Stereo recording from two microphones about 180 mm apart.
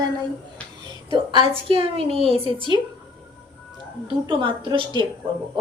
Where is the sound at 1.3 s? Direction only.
25° right (ahead or behind).